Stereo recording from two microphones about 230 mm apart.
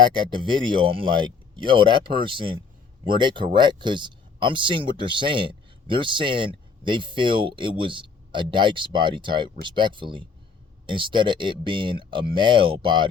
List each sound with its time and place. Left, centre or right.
0.0 s speech: right